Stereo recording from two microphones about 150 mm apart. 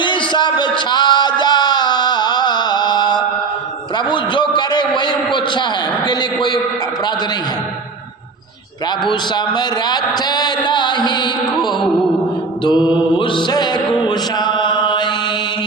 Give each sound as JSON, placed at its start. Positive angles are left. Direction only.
{"t": 0.0, "sound": "a sound", "side_deg": 30}
{"t": 0.9, "sound": "music", "side_deg": 30}
{"t": 3.9, "sound": "a sound", "side_deg": 30}
{"t": 9.6, "sound": "music", "side_deg": 25}
{"t": 12.6, "sound": "mantra", "side_deg": 30}
{"t": 13.1, "sound": "music", "side_deg": 35}